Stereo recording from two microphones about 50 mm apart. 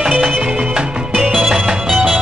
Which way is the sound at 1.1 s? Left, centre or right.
Centre.